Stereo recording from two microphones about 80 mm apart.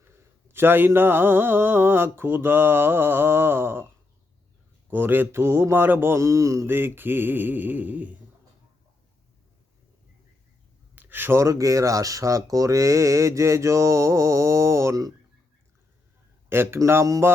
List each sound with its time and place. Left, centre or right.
0.0 s speech: right
4.9 s speech: right
6.7 s speech: right
10.9 s a sound: right
11.4 s speech: right
16.5 s speech: right